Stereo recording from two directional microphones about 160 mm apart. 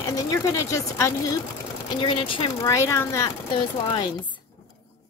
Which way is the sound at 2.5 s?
20° left (ahead or behind).